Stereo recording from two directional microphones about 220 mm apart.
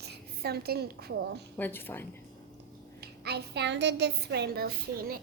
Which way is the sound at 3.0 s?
45° right (ahead or behind).